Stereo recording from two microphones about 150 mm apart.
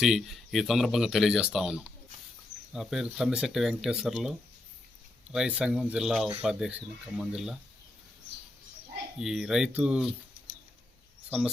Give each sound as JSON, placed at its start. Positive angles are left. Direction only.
{"t": 0.0, "sound": "speech", "side_deg": 0}
{"t": 9.1, "sound": "speech", "side_deg": -5}